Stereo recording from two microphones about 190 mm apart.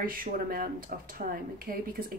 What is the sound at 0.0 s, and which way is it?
Speech, 50° right (ahead or behind).